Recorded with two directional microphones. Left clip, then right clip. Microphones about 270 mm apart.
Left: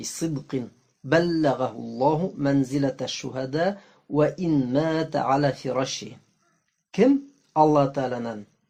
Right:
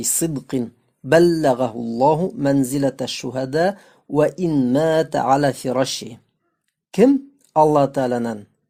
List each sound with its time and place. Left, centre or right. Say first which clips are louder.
0.0 s a man's voice: right 7 dB; right